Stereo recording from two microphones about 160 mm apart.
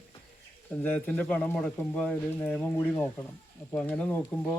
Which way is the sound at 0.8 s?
10° left (ahead or behind).